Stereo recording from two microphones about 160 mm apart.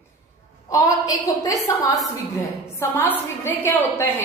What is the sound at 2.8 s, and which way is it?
A woman's voice, 20° left (ahead or behind).